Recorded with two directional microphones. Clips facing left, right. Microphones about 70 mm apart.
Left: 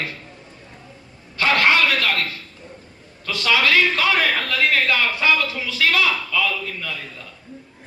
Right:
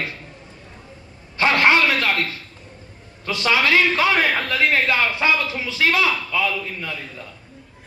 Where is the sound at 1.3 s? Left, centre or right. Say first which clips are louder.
Right 1 dB; right.